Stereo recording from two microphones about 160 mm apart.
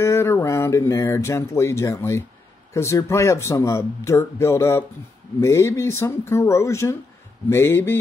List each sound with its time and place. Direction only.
0.0 s speech: 15° left (ahead or behind)